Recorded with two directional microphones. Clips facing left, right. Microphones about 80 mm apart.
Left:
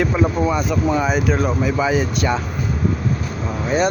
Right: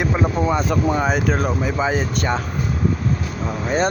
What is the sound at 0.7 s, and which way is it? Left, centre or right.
Speech, right.